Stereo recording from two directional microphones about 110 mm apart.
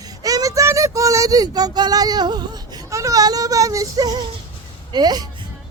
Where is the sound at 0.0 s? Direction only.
35° right (ahead or behind).